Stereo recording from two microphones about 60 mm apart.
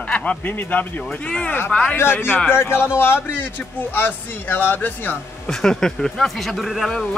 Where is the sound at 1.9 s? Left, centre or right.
Left.